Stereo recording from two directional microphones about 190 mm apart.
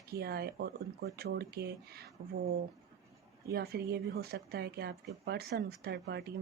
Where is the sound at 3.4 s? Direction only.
55° right (ahead or behind).